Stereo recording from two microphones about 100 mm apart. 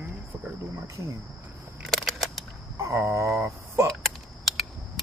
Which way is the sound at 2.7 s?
30° right (ahead or behind).